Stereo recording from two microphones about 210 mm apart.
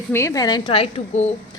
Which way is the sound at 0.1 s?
15° left (ahead or behind).